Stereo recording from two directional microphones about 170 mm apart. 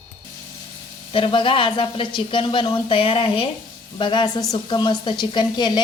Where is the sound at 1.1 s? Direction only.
30° left (ahead or behind).